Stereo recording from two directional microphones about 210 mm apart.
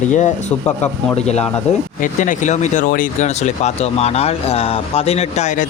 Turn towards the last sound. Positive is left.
turn(degrees=35)  # may be behind; listen again after turning